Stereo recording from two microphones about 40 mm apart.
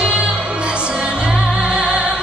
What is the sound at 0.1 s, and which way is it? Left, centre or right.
Music, right.